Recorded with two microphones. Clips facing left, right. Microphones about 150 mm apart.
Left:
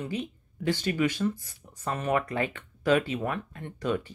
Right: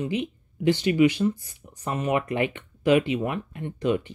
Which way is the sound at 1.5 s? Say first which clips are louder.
Right 2 dB; 15° right (ahead or behind).